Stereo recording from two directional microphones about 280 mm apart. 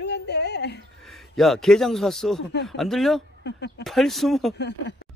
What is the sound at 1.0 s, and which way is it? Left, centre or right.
Speech, centre.